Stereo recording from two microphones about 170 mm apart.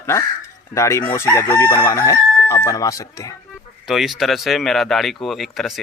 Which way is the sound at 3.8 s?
Centre (ahead or behind).